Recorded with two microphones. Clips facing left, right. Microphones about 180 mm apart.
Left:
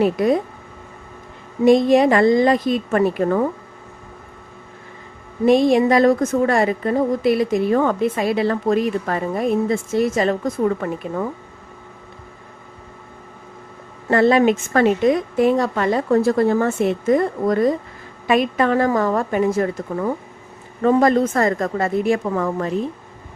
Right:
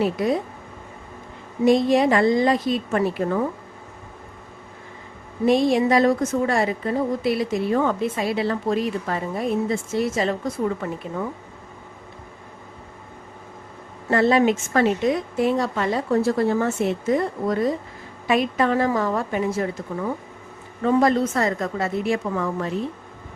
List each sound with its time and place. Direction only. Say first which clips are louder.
0.0 s a woman's voice: left 5 dB; 50° left (ahead or behind)
1.6 s a woman's voice: left 4 dB; 55° left (ahead or behind)
5.5 s a woman's voice: left 4 dB; 55° left (ahead or behind)
14.1 s a woman's voice: left 3 dB; 55° left (ahead or behind)